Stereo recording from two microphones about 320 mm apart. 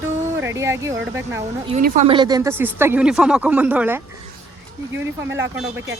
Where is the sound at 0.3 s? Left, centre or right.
Centre.